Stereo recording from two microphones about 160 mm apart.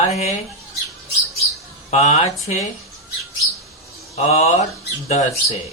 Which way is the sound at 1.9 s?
45° left (ahead or behind).